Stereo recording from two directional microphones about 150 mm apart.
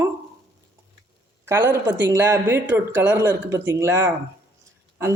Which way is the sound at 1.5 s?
15° right (ahead or behind).